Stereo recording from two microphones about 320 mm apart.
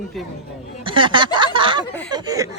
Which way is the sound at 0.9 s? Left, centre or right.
Centre.